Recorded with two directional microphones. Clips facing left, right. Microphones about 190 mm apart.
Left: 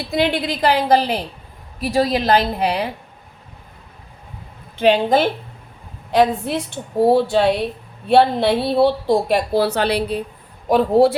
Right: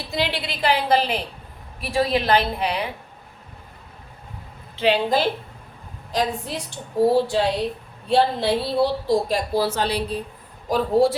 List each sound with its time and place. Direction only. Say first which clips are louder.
0.1 s a woman's voice: left 7 dB; 50° left (ahead or behind)
6.1 s a woman's voice: left 8 dB; 65° left (ahead or behind)